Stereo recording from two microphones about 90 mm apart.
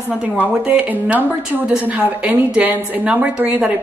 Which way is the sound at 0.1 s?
15° right (ahead or behind).